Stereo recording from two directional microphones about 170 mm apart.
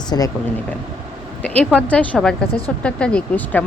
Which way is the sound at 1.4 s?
10° left (ahead or behind).